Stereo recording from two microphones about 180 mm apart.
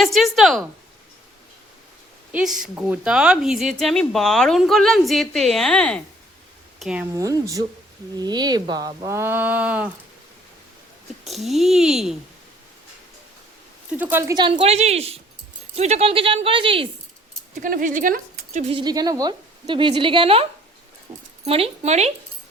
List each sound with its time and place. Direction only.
0.0 s speech: centre (ahead or behind)
2.3 s speech: 5° right (ahead or behind)
7.1 s a woman's voice: 20° right (ahead or behind)
11.3 s speech: centre (ahead or behind)
13.9 s speech: 10° right (ahead or behind)
14.6 s speech: 35° right (ahead or behind)
17.5 s speech: 50° right (ahead or behind)
18.8 s a woman's voice: 20° right (ahead or behind)
21.4 s speech: 35° right (ahead or behind)